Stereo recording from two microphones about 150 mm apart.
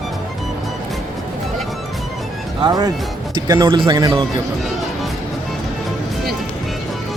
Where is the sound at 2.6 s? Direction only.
25° right (ahead or behind).